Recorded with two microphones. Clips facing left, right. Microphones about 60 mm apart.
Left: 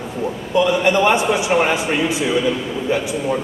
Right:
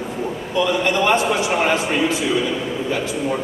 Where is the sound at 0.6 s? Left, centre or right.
Centre.